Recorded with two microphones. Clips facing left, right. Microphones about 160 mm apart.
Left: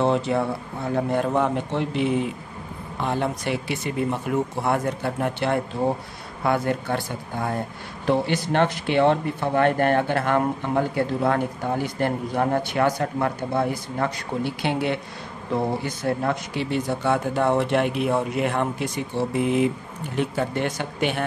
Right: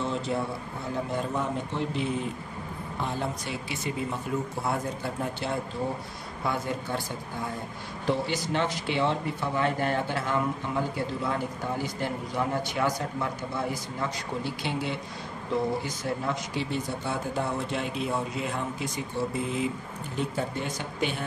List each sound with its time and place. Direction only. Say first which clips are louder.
0.0 s speech: left 8 dB; 70° left (ahead or behind)